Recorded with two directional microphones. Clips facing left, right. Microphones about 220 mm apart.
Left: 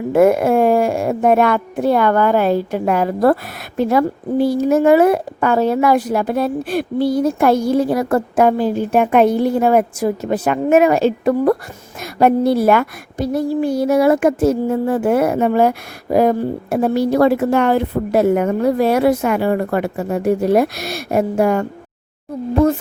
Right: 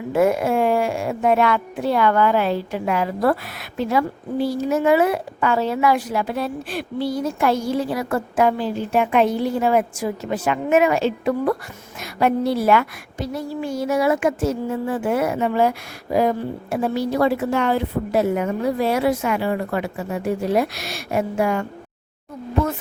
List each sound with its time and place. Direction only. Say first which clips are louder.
0.1 s a woman's voice: left 6 dB; 55° left (ahead or behind)
10.7 s a woman's voice: left 5 dB; 40° left (ahead or behind)
14.3 s a woman's voice: left 7 dB; 55° left (ahead or behind)